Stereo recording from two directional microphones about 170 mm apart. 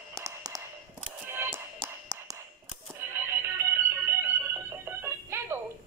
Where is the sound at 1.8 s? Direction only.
20° right (ahead or behind).